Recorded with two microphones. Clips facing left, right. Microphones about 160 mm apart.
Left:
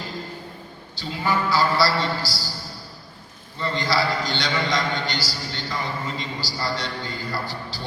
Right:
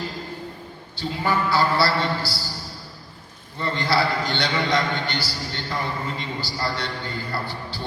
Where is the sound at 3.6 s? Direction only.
60° right (ahead or behind).